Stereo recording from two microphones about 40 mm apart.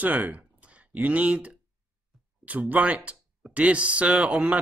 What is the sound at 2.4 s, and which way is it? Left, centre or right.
Speech, right.